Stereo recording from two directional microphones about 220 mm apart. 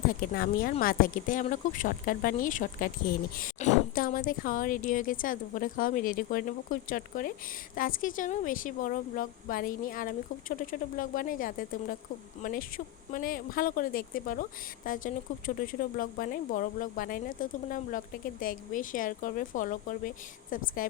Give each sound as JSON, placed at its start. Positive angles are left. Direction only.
{"t": 0.1, "sound": "speech", "side_deg": 40}